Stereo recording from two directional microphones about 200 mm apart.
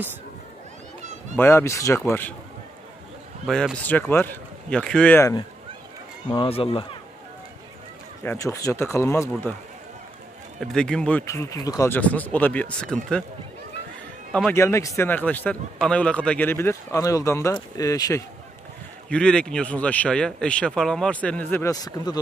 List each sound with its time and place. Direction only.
1.3 s speech: 10° left (ahead or behind)
3.4 s speech: 5° left (ahead or behind)
6.3 s speech: 25° left (ahead or behind)
8.2 s speech: 15° left (ahead or behind)
10.6 s speech: 5° left (ahead or behind)
14.5 s speech: 15° left (ahead or behind)
19.0 s speech: 5° left (ahead or behind)